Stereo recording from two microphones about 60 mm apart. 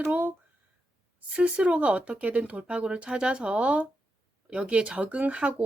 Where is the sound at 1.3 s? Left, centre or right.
Centre.